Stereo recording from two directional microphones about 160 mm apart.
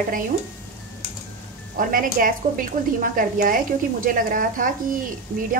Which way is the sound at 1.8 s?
60° right (ahead or behind).